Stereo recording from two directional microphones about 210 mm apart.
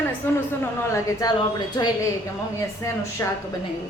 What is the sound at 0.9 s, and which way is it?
Speech, 15° left (ahead or behind).